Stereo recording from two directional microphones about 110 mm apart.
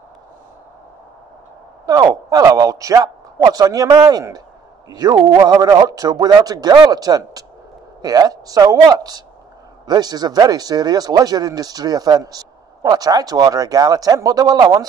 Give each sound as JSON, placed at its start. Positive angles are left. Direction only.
{"t": 1.9, "sound": "speech", "side_deg": -35}